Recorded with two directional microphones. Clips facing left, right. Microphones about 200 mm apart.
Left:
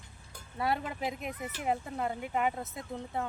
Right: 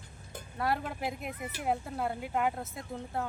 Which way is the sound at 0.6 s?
Centre (ahead or behind).